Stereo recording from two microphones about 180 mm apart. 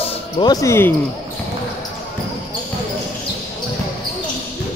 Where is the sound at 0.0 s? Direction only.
25° left (ahead or behind).